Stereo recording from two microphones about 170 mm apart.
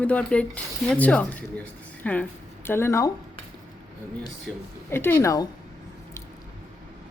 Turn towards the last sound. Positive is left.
turn(degrees=20)  # may be behind; listen again after turning